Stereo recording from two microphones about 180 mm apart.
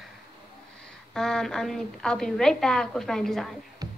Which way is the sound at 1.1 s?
5° left (ahead or behind).